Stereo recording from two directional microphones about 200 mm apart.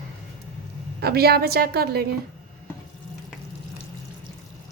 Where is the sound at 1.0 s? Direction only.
50° right (ahead or behind).